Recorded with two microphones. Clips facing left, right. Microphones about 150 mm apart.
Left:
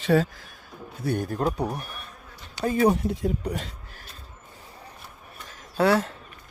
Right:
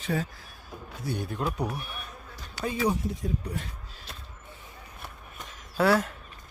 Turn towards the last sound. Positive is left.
turn(degrees=30)  # may be behind; listen again after turning